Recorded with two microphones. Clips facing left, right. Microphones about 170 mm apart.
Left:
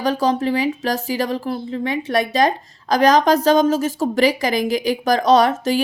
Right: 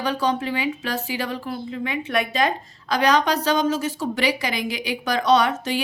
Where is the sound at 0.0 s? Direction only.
40° left (ahead or behind).